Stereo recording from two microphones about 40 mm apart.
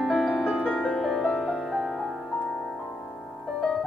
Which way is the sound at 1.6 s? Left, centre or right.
Centre.